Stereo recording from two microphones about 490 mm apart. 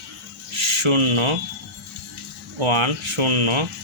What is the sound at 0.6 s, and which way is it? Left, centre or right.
Rub, right.